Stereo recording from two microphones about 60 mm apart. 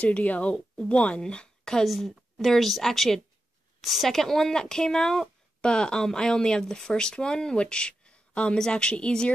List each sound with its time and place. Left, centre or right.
0.0 s speech: left
1.9 s a woman's voice: centre